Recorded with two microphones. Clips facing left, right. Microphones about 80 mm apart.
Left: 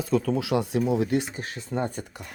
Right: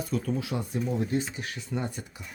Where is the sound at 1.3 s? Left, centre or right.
Left.